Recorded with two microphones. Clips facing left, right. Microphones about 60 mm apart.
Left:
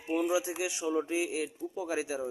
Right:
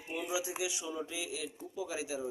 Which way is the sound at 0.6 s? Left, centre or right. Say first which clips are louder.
Left 6 dB; left.